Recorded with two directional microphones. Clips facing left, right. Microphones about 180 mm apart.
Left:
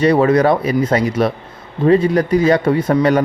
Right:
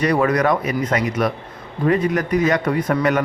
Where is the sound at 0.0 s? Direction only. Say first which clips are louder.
Left 5 dB; 25° left (ahead or behind).